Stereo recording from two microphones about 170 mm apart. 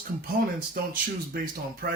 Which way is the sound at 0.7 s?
55° right (ahead or behind).